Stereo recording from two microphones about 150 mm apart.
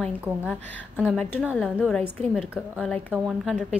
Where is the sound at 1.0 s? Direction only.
10° left (ahead or behind).